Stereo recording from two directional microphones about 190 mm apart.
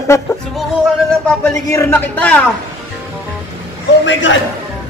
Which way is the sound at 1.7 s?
15° left (ahead or behind).